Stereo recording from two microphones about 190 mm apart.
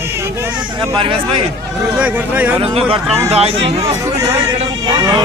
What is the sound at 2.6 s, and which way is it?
Speech, 30° right (ahead or behind).